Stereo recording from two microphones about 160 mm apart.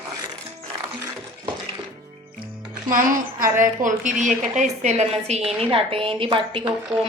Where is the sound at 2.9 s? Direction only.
60° right (ahead or behind).